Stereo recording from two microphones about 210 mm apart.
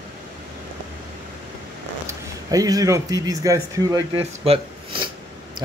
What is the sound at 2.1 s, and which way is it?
A man's voice, 15° right (ahead or behind).